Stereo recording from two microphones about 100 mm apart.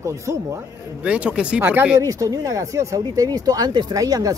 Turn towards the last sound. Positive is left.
turn(degrees=-40)  # may be behind; listen again after turning